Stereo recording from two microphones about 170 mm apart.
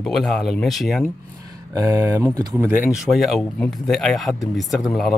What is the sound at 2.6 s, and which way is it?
Speech, 5° right (ahead or behind).